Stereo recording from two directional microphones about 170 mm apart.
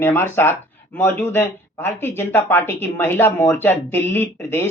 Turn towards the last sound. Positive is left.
turn(degrees=15)  # may be behind; listen again after turning